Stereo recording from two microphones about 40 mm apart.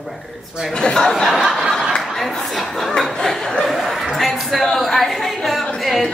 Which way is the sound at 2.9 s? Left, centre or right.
Centre.